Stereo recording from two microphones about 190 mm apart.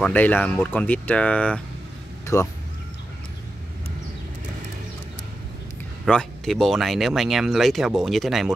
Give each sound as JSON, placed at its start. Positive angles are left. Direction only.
{"t": 0.0, "sound": "speech", "side_deg": 10}
{"t": 2.3, "sound": "speech", "side_deg": 15}
{"t": 6.0, "sound": "speech", "side_deg": 5}